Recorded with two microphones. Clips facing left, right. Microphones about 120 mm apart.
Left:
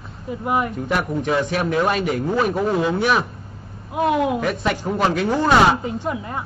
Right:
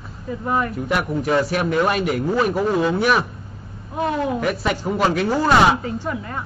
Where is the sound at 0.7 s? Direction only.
5° right (ahead or behind).